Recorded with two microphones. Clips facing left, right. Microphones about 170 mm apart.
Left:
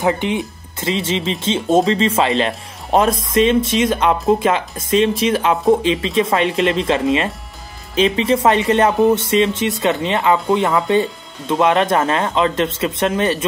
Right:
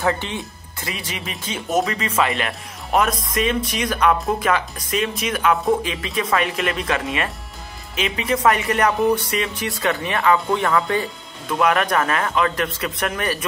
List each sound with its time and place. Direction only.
0.0 s speech: 15° left (ahead or behind)